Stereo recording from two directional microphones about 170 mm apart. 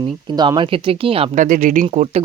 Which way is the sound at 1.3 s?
50° right (ahead or behind).